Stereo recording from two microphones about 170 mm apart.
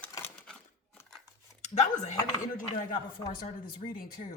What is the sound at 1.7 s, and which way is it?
Speech, 45° left (ahead or behind).